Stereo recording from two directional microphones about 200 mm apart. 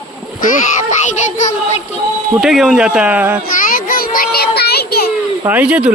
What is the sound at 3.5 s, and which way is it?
Child singing, 45° left (ahead or behind).